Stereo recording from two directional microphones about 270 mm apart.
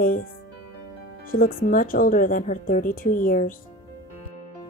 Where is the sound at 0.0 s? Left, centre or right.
Left.